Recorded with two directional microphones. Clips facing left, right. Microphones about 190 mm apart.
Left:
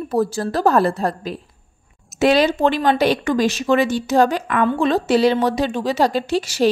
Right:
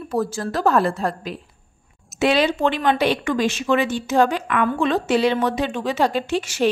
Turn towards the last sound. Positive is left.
turn(degrees=35)  # may be behind; listen again after turning